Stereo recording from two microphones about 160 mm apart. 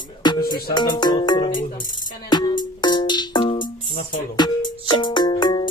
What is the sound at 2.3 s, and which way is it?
Music, 25° left (ahead or behind).